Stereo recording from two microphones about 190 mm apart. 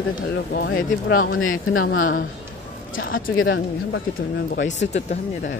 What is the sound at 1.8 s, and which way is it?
Speech, 50° left (ahead or behind).